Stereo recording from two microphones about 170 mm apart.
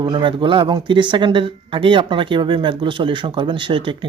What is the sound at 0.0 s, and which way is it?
Speech, 30° right (ahead or behind).